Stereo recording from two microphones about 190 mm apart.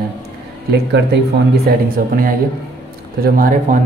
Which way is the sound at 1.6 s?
50° right (ahead or behind).